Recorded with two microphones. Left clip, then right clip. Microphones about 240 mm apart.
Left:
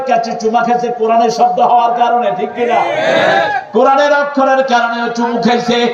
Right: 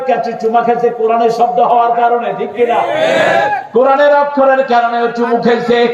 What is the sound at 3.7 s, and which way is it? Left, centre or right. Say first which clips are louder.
Speech: right 1 dB; left.